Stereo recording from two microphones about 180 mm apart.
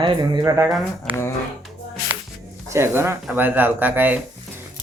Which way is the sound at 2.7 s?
15° right (ahead or behind).